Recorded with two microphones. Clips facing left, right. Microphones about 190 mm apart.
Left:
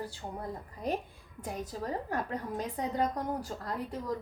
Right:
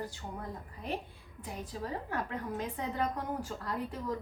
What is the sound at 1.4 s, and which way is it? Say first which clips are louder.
A woman's voice: left 3 dB; 40° left (ahead or behind).